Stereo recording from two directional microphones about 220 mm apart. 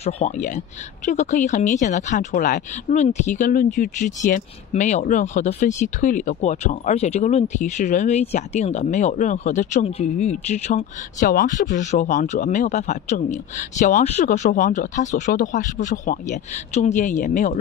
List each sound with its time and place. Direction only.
0.0 s speech: 30° left (ahead or behind)